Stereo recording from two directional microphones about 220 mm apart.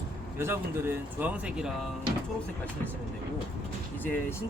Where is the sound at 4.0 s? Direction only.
10° left (ahead or behind).